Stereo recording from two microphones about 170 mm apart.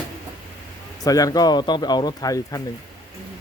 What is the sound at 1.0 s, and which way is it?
Speech, 20° left (ahead or behind).